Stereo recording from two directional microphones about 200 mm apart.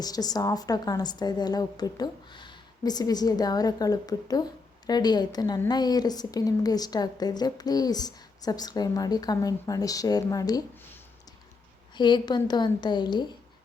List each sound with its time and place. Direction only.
0.0 s a woman's voice: 20° left (ahead or behind)
11.9 s a woman's voice: 20° left (ahead or behind)